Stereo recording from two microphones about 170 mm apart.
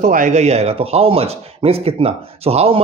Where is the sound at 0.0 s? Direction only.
50° right (ahead or behind).